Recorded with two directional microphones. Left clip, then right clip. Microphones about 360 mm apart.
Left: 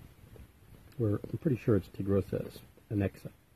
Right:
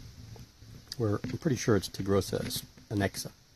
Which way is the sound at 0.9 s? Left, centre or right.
Centre.